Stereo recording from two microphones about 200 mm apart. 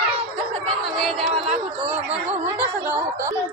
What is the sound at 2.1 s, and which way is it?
A woman's voice, 10° right (ahead or behind).